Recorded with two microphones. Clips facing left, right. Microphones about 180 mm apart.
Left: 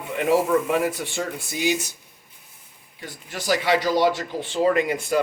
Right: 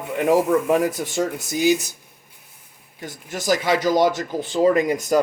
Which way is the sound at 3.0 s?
45° right (ahead or behind).